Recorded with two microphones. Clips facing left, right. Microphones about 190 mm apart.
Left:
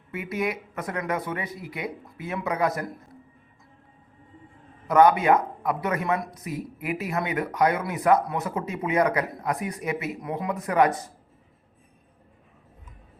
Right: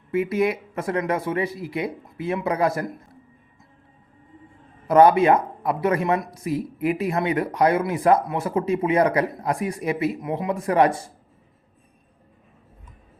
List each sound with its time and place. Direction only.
0.1 s speech: 30° right (ahead or behind)
4.9 s speech: 30° right (ahead or behind)